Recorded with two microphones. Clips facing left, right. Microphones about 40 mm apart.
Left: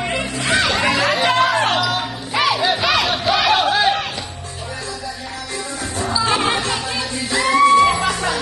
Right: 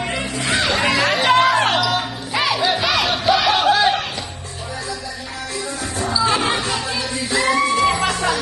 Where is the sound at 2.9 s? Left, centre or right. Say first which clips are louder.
Even; centre.